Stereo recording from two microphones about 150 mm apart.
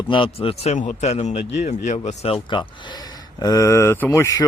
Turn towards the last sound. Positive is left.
turn(degrees=20)  # may be behind; listen again after turning